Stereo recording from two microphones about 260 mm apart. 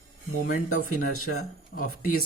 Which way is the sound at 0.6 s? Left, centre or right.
Left.